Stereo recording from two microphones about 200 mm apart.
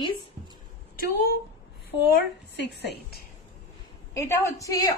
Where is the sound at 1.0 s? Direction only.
50° left (ahead or behind).